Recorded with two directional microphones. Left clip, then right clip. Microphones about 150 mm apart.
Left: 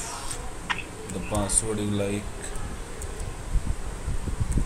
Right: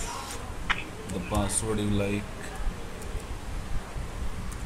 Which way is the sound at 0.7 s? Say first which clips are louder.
Even; 15° right (ahead or behind).